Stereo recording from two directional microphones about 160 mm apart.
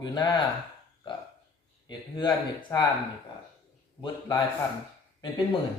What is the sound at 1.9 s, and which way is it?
Speech, 30° left (ahead or behind).